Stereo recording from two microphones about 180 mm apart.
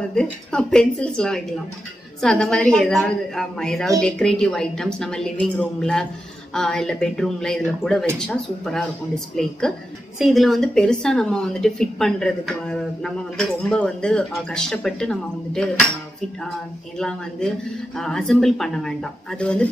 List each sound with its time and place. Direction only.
0.1 s a woman's voice: 5° left (ahead or behind)
17.9 s a woman's voice: 5° left (ahead or behind)